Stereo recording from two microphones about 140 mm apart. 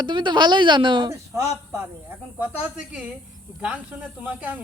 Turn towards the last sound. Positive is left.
turn(degrees=-10)  # may be behind; listen again after turning